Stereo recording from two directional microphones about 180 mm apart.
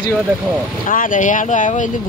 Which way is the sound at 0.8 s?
50° left (ahead or behind).